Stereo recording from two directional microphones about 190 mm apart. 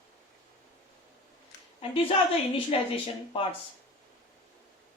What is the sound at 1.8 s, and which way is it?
A woman's voice, 30° left (ahead or behind).